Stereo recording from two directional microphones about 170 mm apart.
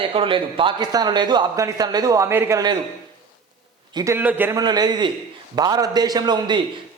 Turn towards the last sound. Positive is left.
turn(degrees=-25)  # may be behind; listen again after turning